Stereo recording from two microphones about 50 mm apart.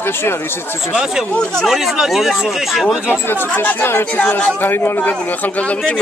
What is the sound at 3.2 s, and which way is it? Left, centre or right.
Speech, left.